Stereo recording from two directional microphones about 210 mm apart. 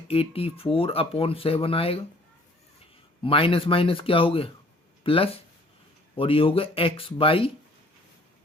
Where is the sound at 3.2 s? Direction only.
25° left (ahead or behind).